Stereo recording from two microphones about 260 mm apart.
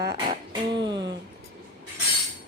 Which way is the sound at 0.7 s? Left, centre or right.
Centre.